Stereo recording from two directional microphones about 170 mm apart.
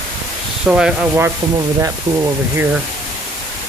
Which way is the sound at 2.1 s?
30° right (ahead or behind).